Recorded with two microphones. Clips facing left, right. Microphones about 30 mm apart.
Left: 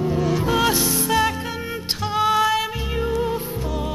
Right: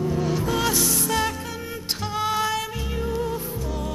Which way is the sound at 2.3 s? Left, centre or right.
Centre.